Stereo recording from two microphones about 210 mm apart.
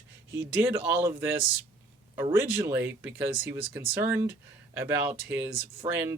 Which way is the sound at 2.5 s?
10° right (ahead or behind).